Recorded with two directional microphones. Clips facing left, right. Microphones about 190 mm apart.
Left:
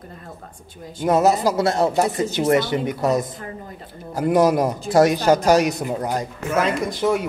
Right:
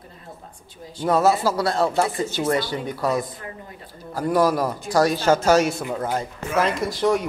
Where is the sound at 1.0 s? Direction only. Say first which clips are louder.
Left 2 dB; 20° left (ahead or behind).